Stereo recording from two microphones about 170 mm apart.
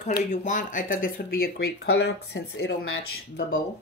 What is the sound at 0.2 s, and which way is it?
Speech, 45° left (ahead or behind).